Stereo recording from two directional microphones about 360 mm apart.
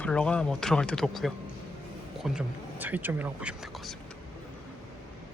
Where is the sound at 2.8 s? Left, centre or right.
Centre.